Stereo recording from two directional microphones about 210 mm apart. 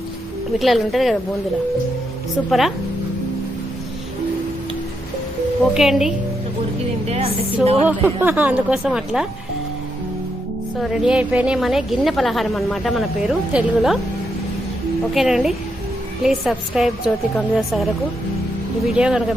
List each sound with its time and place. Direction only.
0.6 s a woman's voice: centre (ahead or behind)
2.5 s a woman's voice: centre (ahead or behind)
5.7 s a woman's voice: centre (ahead or behind)
7.1 s a woman's voice: 30° right (ahead or behind)
7.9 s speech: 10° right (ahead or behind)
10.8 s a woman's voice: centre (ahead or behind)
15.1 s a woman's voice: centre (ahead or behind)
18.9 s a woman's voice: 5° right (ahead or behind)